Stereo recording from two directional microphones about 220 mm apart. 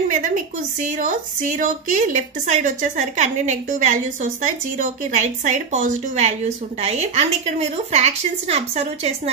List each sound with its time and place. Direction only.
0.1 s a woman's voice: 35° right (ahead or behind)